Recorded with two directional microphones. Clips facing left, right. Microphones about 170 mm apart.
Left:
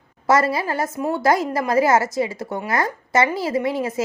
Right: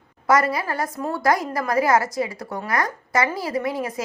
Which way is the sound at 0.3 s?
25° left (ahead or behind).